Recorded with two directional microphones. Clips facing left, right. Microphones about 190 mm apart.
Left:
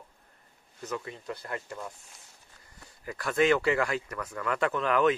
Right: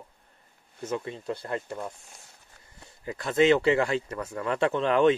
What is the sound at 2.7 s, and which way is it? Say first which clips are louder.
Speech: right 3 dB; 25° right (ahead or behind).